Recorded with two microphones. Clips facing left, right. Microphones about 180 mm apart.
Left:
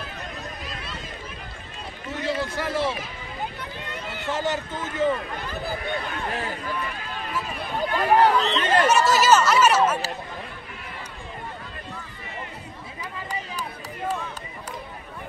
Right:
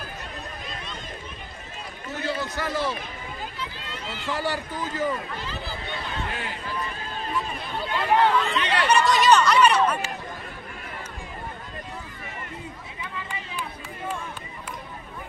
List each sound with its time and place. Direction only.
2.2 s run: 30° left (ahead or behind)
3.5 s run: 60° left (ahead or behind)
4.3 s speech: 20° left (ahead or behind)
5.4 s speech: 55° left (ahead or behind)
6.8 s run: 35° right (ahead or behind)
7.8 s speech: 40° left (ahead or behind)
9.0 s speech: 5° left (ahead or behind)
13.3 s a sound: 40° left (ahead or behind)